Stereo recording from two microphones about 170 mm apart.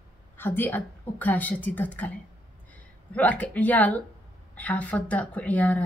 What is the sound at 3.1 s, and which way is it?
Speech, 10° left (ahead or behind).